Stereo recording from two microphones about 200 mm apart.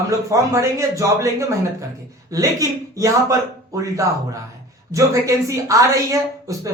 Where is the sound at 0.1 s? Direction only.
15° right (ahead or behind).